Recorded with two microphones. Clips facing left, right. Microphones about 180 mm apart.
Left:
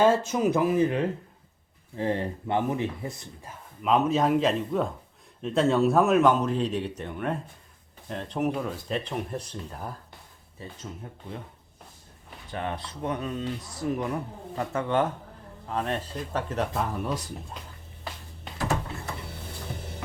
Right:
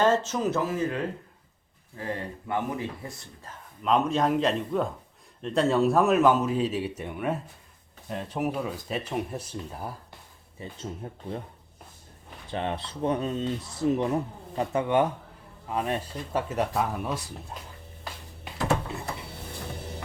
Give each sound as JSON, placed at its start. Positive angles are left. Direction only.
{"t": 0.0, "sound": "speech", "side_deg": 10}
{"t": 3.8, "sound": "speech", "side_deg": 5}
{"t": 11.0, "sound": "speech", "side_deg": -35}
{"t": 12.5, "sound": "speech", "side_deg": -25}